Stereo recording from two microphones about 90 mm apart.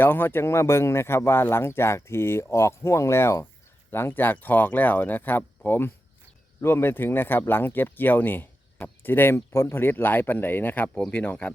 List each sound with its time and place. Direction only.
0.0 s speech: 25° left (ahead or behind)